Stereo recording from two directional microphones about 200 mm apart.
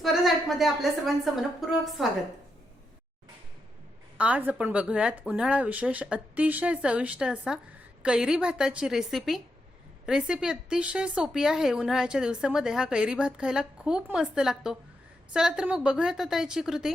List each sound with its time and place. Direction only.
0.0 s a woman's voice: centre (ahead or behind)
4.2 s speech: 5° right (ahead or behind)